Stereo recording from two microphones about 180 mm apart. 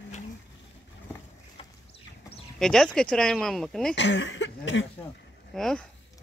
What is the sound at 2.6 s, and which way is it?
Speech, 5° left (ahead or behind).